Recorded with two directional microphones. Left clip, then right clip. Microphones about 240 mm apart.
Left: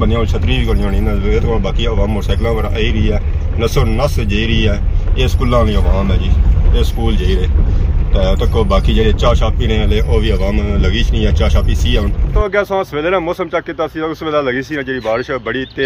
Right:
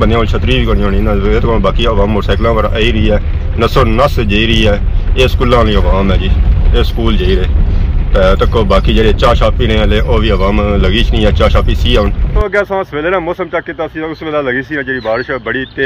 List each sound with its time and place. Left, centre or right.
0.1 s speech: centre
5.4 s speech: right
6.7 s speech: centre